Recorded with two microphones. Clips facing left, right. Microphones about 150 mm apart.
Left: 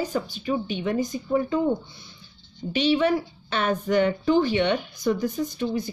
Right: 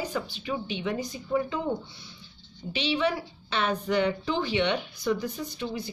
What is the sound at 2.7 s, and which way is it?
A woman's voice, 50° left (ahead or behind).